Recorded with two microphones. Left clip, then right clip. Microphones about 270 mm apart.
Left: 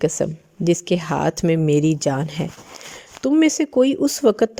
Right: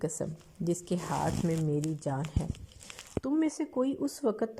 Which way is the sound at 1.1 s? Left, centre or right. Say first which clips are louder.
Left 11 dB; left.